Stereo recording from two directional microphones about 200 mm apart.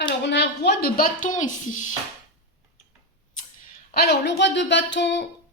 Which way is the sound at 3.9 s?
55° left (ahead or behind).